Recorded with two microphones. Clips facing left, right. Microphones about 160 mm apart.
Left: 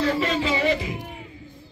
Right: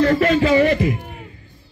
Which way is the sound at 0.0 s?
55° right (ahead or behind).